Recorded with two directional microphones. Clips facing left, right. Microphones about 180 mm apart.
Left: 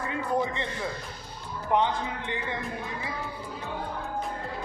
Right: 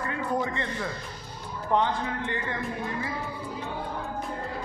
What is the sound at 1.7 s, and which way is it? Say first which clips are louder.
Speech: even; 15° left (ahead or behind).